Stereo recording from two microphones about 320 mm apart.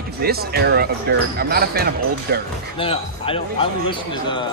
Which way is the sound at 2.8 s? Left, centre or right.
Centre.